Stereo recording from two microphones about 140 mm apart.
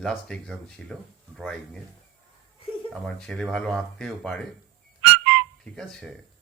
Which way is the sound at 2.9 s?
5° left (ahead or behind).